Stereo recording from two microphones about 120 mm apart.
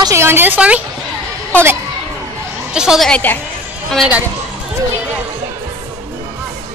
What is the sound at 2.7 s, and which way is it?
Speech, 5° right (ahead or behind).